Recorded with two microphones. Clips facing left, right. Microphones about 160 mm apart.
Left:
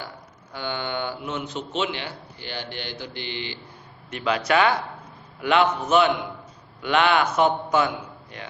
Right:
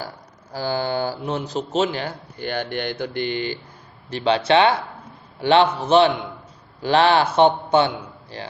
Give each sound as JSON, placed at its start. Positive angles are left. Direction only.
{"t": 0.5, "sound": "a man's voice", "side_deg": -35}
{"t": 4.1, "sound": "a man's voice", "side_deg": -30}